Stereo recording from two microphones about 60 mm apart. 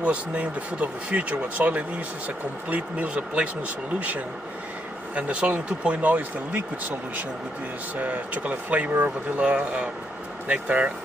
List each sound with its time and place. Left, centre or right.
0.0 s speech: right
5.1 s speech: centre